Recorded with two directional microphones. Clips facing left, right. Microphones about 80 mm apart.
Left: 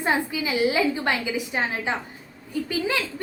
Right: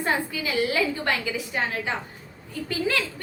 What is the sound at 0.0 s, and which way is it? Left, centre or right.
A woman's voice, centre.